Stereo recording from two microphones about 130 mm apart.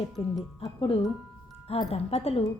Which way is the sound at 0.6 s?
45° left (ahead or behind).